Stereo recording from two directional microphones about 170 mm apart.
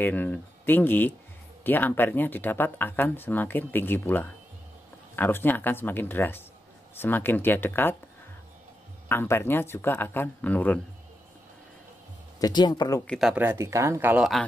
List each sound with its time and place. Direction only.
0.0 s speech: 10° left (ahead or behind)
9.1 s speech: 15° left (ahead or behind)
12.4 s speech: 25° left (ahead or behind)
13.0 s speech: 5° left (ahead or behind)
13.3 s speech: 10° right (ahead or behind)